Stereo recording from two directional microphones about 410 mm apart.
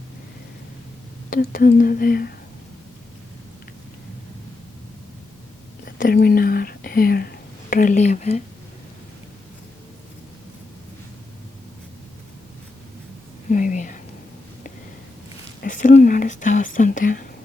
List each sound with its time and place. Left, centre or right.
1.3 s speech: left
5.8 s speech: left
13.5 s speech: centre
15.6 s speech: centre